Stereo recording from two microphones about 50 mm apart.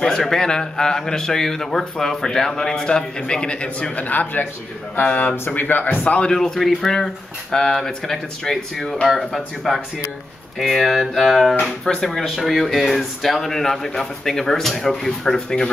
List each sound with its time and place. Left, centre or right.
0.0 s a man's voice: centre
3.9 s speech: left
6.2 s a man's voice: centre
11.1 s a man's voice: centre